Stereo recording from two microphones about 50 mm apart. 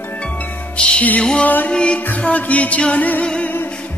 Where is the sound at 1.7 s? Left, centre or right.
Centre.